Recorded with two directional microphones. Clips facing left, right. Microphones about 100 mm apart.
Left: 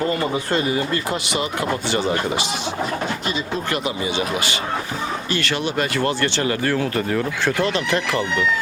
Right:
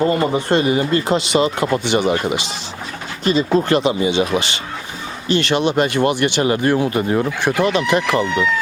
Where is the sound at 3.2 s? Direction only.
35° right (ahead or behind).